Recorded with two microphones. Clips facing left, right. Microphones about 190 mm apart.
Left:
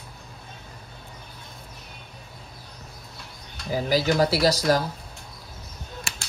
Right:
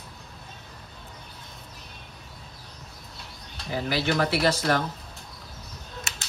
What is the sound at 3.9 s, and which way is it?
Speech, 40° left (ahead or behind).